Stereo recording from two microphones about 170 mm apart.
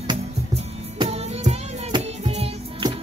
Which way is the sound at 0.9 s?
35° right (ahead or behind).